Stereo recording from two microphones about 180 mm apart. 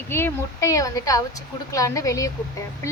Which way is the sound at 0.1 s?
15° left (ahead or behind).